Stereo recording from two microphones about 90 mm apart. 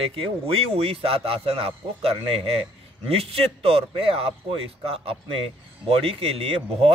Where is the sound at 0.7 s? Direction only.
90° right.